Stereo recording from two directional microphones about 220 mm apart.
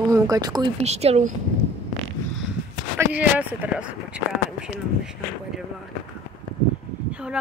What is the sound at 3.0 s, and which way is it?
Speech, 5° right (ahead or behind).